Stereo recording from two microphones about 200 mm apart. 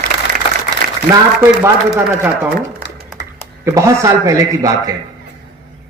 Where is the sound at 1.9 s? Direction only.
10° right (ahead or behind).